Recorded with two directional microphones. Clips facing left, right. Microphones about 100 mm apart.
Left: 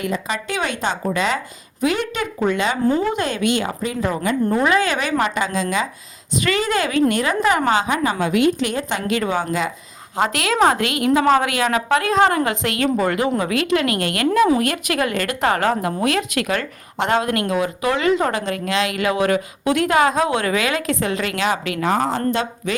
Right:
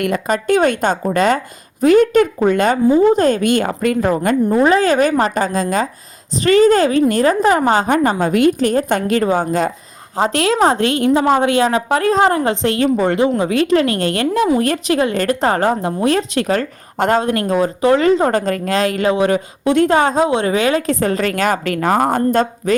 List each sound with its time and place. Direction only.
0.0 s a woman's voice: 55° right (ahead or behind)
4.6 s a woman's voice: 35° right (ahead or behind)
10.2 s speech: 35° right (ahead or behind)
19.1 s a woman's voice: 25° right (ahead or behind); by 22.7 s 45° right (ahead or behind)